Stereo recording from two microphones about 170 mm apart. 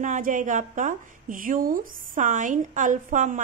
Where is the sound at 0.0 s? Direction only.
50° right (ahead or behind).